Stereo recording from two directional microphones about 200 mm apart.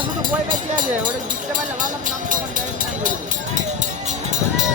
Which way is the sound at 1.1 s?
40° right (ahead or behind).